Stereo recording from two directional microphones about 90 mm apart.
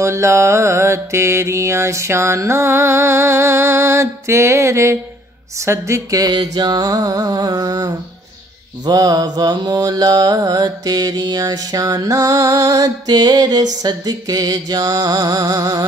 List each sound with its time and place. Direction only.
0.0 s mantra: 30° right (ahead or behind)
6.3 s mantra: 50° right (ahead or behind)